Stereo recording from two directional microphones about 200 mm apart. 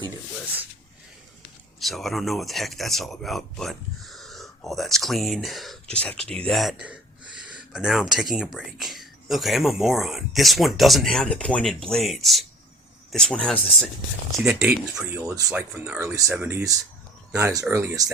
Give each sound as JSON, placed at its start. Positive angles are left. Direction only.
{"t": 1.8, "sound": "speech", "side_deg": 0}